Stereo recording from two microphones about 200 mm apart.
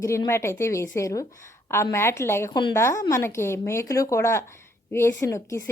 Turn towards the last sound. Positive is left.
turn(degrees=15)  # may be behind; listen again after turning